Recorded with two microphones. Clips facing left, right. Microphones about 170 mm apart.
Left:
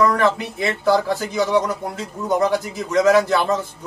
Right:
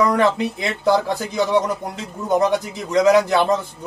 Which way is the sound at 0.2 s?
20° right (ahead or behind).